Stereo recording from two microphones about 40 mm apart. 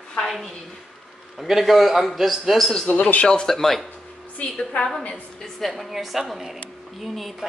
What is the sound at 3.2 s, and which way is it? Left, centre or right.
Speech, left.